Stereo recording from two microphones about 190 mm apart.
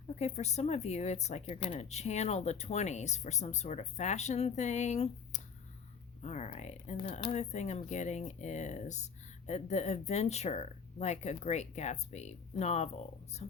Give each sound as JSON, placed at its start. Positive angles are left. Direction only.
{"t": 0.2, "sound": "speech", "side_deg": 35}